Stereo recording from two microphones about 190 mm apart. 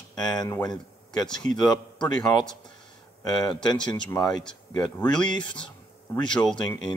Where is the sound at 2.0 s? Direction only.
5° left (ahead or behind).